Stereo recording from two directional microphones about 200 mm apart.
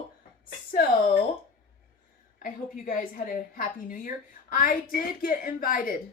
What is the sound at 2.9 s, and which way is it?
A woman's voice, 45° left (ahead or behind).